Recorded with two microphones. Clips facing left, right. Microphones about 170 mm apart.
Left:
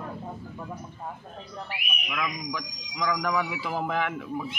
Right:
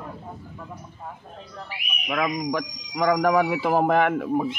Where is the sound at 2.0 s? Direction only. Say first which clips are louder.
Right 8 dB; 55° right (ahead or behind).